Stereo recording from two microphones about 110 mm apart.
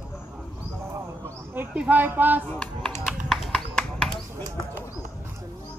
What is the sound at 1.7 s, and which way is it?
Speech, 15° right (ahead or behind).